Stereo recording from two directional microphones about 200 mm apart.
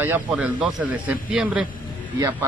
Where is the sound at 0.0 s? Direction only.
10° right (ahead or behind).